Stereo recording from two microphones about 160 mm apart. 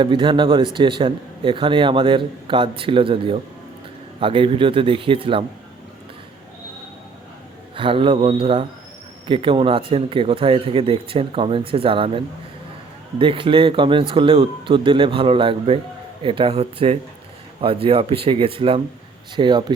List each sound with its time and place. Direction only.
0.0 s a man's voice: 30° right (ahead or behind)
7.8 s a man's voice: 35° right (ahead or behind)